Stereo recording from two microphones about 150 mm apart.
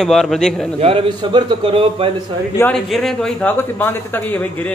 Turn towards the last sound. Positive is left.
turn(degrees=10)  # may be behind; listen again after turning